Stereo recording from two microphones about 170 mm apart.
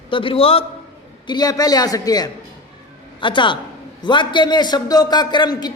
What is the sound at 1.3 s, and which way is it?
A man's voice, 20° left (ahead or behind).